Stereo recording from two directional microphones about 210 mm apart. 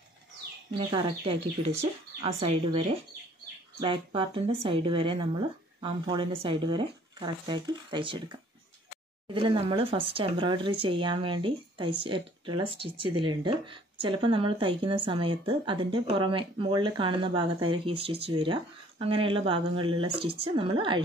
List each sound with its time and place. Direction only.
0.7 s speech: 25° right (ahead or behind)
3.8 s speech: 25° right (ahead or behind)